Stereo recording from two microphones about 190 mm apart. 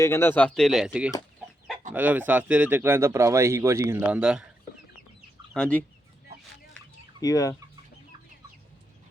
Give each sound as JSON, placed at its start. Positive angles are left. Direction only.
{"t": 0.0, "sound": "speech", "side_deg": 15}
{"t": 1.9, "sound": "speech", "side_deg": -10}
{"t": 5.5, "sound": "speech", "side_deg": 5}
{"t": 7.2, "sound": "chicken", "side_deg": 20}